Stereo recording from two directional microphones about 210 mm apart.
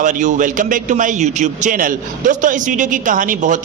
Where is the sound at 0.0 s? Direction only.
35° right (ahead or behind).